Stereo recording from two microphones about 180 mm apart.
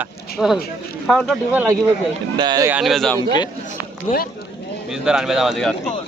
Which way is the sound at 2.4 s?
25° right (ahead or behind).